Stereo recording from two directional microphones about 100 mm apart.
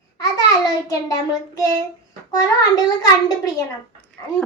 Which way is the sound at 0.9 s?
35° left (ahead or behind).